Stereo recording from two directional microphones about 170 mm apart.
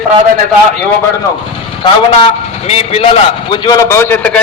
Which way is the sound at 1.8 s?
35° left (ahead or behind).